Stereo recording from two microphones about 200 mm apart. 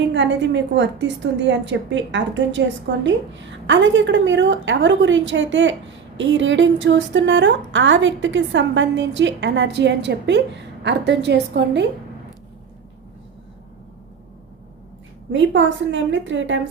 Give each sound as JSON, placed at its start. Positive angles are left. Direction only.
{"t": 0.0, "sound": "a woman's voice", "side_deg": -65}
{"t": 15.3, "sound": "a woman's voice", "side_deg": -65}